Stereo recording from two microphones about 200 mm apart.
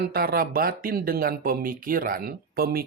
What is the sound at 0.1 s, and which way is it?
Speech, 50° right (ahead or behind).